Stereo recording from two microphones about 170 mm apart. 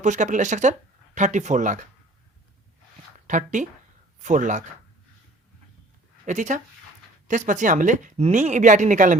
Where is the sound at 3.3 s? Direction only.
45° right (ahead or behind).